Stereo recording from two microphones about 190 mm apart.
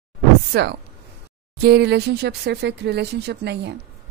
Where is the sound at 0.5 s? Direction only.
60° right (ahead or behind).